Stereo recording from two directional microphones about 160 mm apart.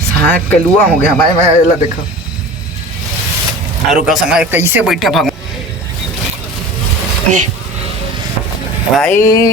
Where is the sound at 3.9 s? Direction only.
Centre (ahead or behind).